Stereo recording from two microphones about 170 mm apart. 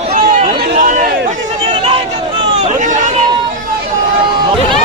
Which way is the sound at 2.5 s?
40° right (ahead or behind).